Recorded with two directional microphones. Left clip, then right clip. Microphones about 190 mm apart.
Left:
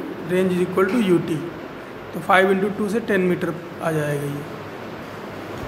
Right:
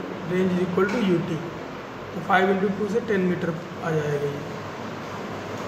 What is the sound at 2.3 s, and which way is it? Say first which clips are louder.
Speech: left 4 dB; 60° left (ahead or behind).